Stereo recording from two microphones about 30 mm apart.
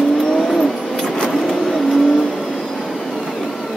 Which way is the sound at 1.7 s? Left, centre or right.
Centre.